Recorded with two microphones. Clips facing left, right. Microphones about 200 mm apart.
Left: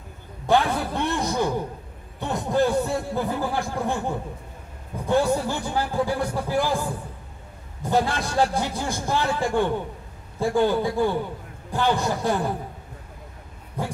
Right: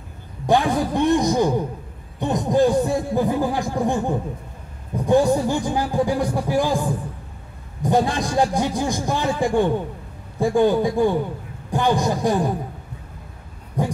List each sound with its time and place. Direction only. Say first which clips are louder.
0.5 s speech: right 3 dB; 15° right (ahead or behind)
5.0 s speech: right 5 dB; 15° right (ahead or behind)
13.8 s speech: right 6 dB; 15° right (ahead or behind)